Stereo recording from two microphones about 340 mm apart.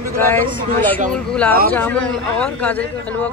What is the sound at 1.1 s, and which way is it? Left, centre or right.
Speech, centre.